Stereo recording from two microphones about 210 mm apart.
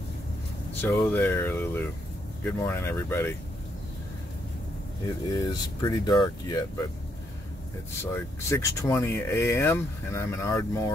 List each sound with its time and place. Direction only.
0.7 s speech: 10° left (ahead or behind)
5.0 s speech: 20° left (ahead or behind)
8.0 s speech: 15° left (ahead or behind)